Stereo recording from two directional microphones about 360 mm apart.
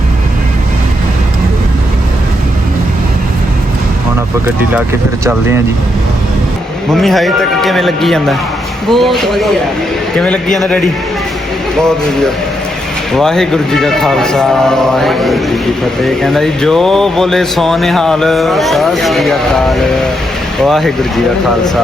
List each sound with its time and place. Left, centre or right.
6.9 s speech: centre
13.1 s speech: centre